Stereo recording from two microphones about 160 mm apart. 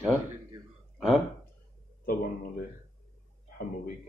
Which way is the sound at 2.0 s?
65° left (ahead or behind).